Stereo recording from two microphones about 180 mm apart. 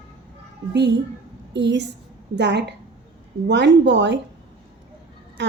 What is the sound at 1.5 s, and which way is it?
A woman's voice, 75° right (ahead or behind).